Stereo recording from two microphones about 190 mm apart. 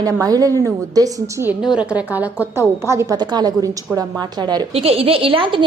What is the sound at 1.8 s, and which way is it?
A woman's voice, 5° right (ahead or behind).